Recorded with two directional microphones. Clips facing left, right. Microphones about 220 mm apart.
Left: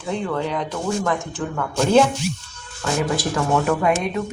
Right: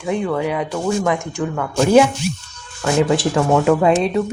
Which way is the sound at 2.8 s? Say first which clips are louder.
Right 6 dB; 20° right (ahead or behind).